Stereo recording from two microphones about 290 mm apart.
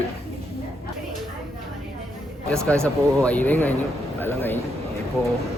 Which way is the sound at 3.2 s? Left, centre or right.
Centre.